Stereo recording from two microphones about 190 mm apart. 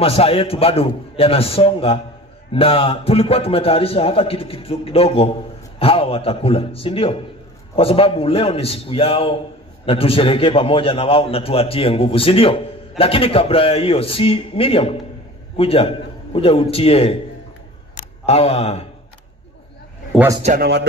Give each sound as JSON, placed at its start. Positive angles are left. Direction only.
{"t": 0.0, "sound": "a man's voice", "side_deg": 30}